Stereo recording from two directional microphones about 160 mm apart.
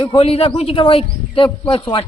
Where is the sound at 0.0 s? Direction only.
35° left (ahead or behind).